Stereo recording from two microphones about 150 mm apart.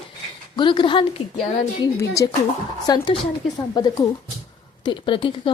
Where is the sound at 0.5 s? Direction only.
30° left (ahead or behind).